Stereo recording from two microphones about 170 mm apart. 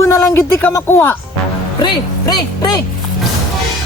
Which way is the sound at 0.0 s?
15° left (ahead or behind).